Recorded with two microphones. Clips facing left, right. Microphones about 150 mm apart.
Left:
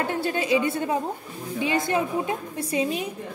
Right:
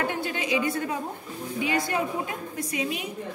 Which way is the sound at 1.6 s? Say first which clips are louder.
Left 3 dB; 25° left (ahead or behind).